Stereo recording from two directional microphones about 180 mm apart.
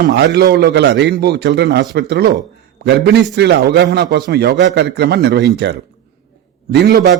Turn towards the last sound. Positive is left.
turn(degrees=-65)  # may be behind; listen again after turning